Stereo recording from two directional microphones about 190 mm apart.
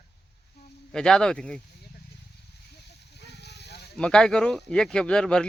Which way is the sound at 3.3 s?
60° left (ahead or behind).